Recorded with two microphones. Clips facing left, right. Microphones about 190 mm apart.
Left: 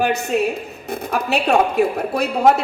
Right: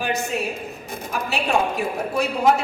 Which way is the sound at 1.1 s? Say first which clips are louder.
Left 6 dB; 65° left (ahead or behind).